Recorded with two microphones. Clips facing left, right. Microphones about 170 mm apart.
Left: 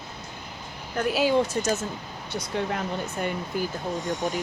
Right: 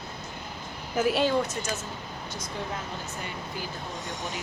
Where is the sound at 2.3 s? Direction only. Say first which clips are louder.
Left 7 dB; 70° left (ahead or behind).